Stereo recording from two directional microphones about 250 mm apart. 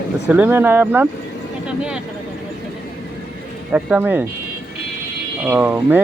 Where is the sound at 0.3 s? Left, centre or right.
Centre.